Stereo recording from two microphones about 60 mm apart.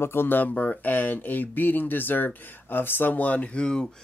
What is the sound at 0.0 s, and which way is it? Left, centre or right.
Speech, left.